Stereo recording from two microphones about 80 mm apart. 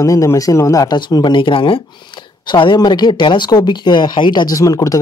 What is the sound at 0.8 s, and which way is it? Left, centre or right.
Speech, left.